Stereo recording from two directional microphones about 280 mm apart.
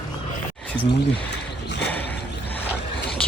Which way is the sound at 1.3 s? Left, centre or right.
Left.